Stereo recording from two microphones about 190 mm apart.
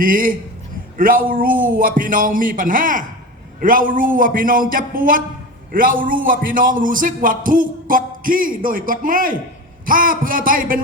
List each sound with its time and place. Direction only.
0.0 s a man's voice: 45° right (ahead or behind)